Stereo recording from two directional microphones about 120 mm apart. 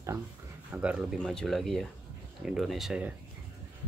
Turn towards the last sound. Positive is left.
turn(degrees=0)  # may be behind; listen again after turning